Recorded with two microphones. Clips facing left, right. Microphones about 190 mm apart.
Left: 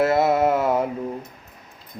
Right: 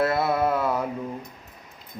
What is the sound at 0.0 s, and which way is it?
Mantra, 25° left (ahead or behind).